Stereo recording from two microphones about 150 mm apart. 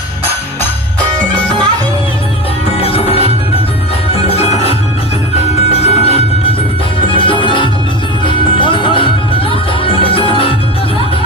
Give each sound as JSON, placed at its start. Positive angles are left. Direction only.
{"t": 2.8, "sound": "music", "side_deg": 40}